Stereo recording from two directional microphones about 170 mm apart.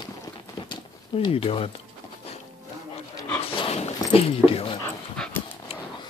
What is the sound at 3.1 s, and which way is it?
Dog, 15° left (ahead or behind).